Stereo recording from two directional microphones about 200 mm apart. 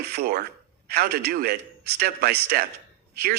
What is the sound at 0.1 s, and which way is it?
A man's voice, 50° right (ahead or behind).